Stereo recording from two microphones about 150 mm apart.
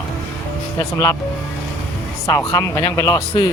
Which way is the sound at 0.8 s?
25° left (ahead or behind).